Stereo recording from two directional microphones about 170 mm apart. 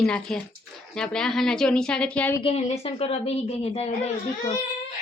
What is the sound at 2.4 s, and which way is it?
Speech, 40° left (ahead or behind).